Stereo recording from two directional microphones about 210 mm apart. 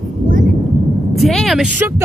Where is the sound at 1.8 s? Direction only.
10° right (ahead or behind).